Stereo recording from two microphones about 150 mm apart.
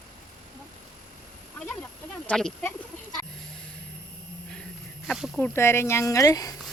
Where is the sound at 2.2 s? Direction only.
5° left (ahead or behind).